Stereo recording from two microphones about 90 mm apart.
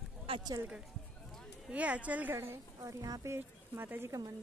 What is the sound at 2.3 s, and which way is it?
A woman's voice, 30° right (ahead or behind).